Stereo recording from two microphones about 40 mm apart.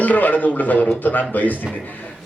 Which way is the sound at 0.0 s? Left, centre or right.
Left.